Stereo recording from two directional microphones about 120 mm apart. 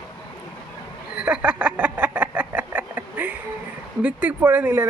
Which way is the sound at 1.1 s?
10° right (ahead or behind).